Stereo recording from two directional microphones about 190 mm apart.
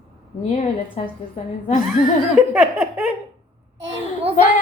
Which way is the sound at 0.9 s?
45° left (ahead or behind).